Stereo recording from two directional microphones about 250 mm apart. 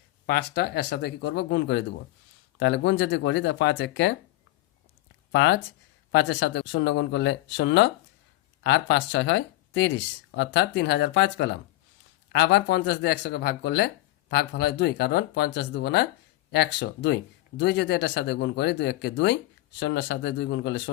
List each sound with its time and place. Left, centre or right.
0.3 s speech: left
5.3 s speech: left